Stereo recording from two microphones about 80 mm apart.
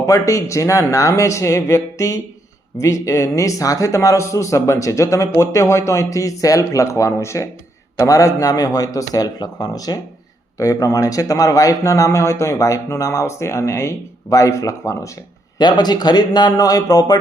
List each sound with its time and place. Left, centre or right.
0.0 s speech: left
15.5 s a man's voice: left